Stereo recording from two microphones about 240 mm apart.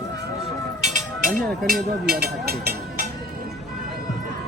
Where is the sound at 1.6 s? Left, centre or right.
Right.